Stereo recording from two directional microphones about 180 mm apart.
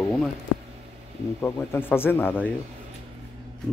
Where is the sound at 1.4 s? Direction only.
10° left (ahead or behind).